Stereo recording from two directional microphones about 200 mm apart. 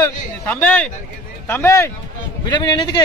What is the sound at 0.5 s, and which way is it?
Speech, 10° left (ahead or behind).